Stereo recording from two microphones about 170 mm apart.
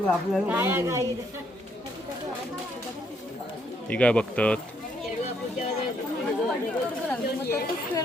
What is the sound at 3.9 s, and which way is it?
Speech, 5° left (ahead or behind).